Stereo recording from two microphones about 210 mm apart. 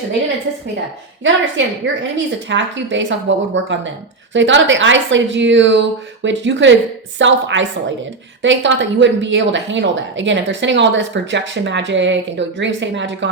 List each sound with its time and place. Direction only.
1.2 s speech: 60° right (ahead or behind)